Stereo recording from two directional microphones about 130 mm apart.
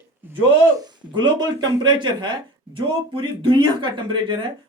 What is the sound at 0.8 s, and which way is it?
Speech, 35° right (ahead or behind).